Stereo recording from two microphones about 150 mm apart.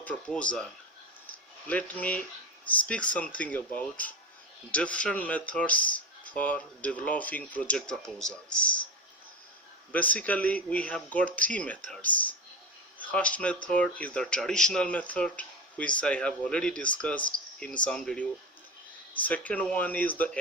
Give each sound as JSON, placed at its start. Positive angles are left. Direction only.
{"t": 0.0, "sound": "speech", "side_deg": 10}
{"t": 9.9, "sound": "speech", "side_deg": 10}